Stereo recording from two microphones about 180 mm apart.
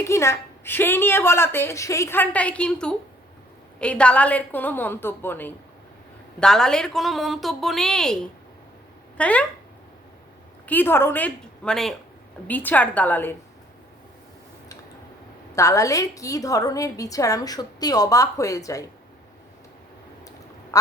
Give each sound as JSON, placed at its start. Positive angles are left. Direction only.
{"t": 0.0, "sound": "a woman's voice", "side_deg": 15}
{"t": 10.7, "sound": "a woman's voice", "side_deg": 10}
{"t": 15.5, "sound": "a woman's voice", "side_deg": 15}